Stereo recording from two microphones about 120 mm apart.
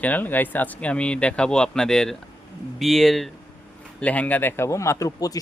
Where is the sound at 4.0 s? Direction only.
15° left (ahead or behind); by 5.3 s 30° left (ahead or behind).